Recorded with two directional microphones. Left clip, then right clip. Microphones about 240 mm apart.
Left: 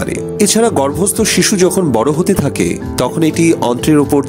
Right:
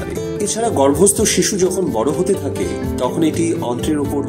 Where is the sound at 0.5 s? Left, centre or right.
Left.